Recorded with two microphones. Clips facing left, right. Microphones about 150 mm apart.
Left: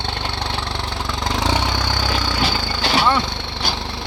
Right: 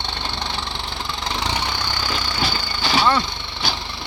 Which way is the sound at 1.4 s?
90° left.